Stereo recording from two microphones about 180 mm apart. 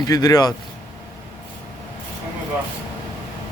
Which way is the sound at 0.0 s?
20° left (ahead or behind).